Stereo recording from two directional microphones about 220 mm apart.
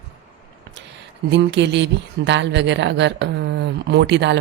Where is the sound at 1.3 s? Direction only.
55° right (ahead or behind).